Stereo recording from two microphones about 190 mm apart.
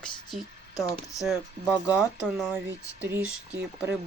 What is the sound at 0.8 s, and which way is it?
Speech, 15° left (ahead or behind).